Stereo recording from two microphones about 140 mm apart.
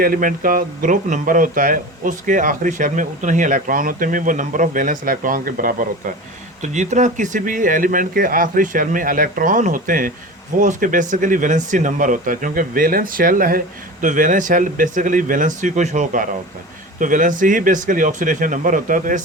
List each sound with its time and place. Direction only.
0.0 s speech: 85° right
6.6 s speech: 60° right (ahead or behind); by 10.1 s 75° right (ahead or behind)
10.6 s speech: 65° right (ahead or behind); by 13.6 s 85° right
14.0 s speech: 65° right (ahead or behind)